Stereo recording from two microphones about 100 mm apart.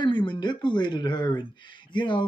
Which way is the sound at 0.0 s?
50° left (ahead or behind).